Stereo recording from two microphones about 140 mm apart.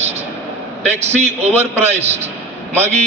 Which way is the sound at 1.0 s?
50° right (ahead or behind).